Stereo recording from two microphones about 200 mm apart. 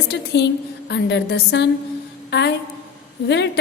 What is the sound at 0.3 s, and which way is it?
A woman's voice, 60° left (ahead or behind).